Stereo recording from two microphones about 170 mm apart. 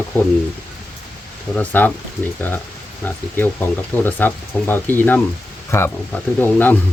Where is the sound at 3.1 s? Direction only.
10° left (ahead or behind).